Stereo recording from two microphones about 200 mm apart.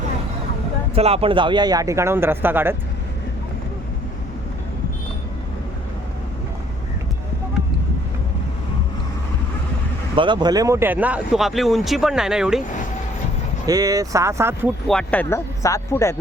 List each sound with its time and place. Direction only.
0.9 s speech: 30° right (ahead or behind); by 2.7 s 10° right (ahead or behind)
10.2 s speech: 25° right (ahead or behind); by 12.6 s 5° right (ahead or behind)
13.7 s speech: 20° right (ahead or behind)
14.8 s speech: 5° left (ahead or behind)